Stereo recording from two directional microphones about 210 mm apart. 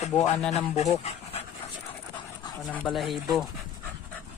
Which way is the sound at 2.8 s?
Centre (ahead or behind).